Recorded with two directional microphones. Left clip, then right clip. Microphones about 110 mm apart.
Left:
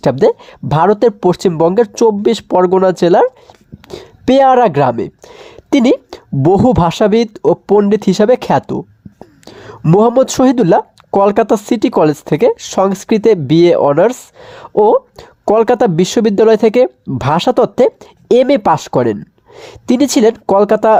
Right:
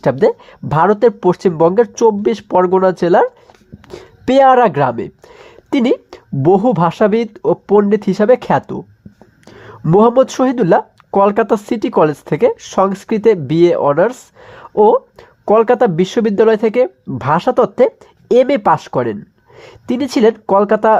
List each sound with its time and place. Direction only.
0.0 s speech: 30° left (ahead or behind)
8.6 s a sound: 35° left (ahead or behind)
9.9 s speech: 35° left (ahead or behind)